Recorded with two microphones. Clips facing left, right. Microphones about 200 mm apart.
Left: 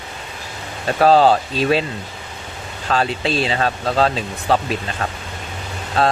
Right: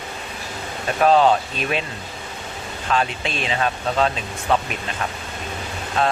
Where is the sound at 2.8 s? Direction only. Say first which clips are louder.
Left 3 dB; 35° left (ahead or behind).